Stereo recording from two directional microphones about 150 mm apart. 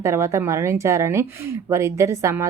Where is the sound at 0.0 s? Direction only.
20° right (ahead or behind).